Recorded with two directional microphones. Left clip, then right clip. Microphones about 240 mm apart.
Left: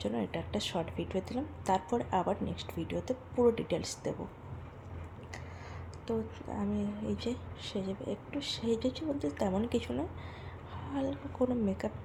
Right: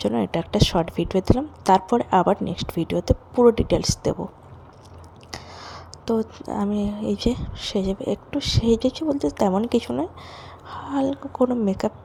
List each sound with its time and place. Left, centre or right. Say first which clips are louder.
0.0 s speech: right 12 dB; right
5.3 s speech: right 13 dB; right